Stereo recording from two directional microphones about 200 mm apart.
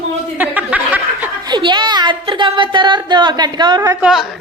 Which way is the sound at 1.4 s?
20° right (ahead or behind).